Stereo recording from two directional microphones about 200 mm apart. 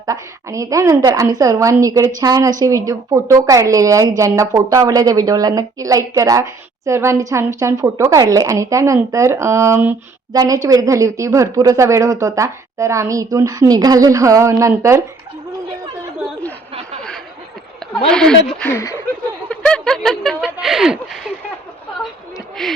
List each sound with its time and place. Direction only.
0.0 s a woman's voice: 15° right (ahead or behind)
17.9 s speech: 5° left (ahead or behind)
22.6 s a sound: centre (ahead or behind)